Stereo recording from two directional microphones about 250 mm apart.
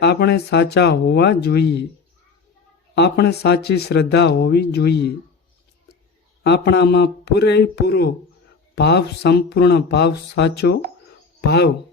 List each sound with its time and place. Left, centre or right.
0.0 s speech: left
2.9 s speech: left
6.4 s speech: left